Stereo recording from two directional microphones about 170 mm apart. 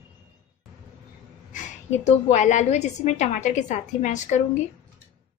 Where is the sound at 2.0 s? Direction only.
40° left (ahead or behind).